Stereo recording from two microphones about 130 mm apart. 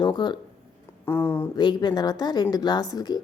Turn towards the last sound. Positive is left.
turn(degrees=30)  # may be behind; listen again after turning